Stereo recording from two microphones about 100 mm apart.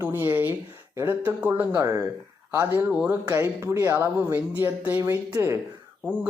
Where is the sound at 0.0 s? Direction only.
25° right (ahead or behind).